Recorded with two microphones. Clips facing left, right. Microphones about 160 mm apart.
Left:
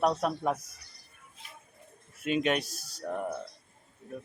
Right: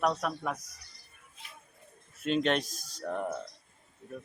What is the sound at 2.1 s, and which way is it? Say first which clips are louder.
Speech: even; 10° left (ahead or behind).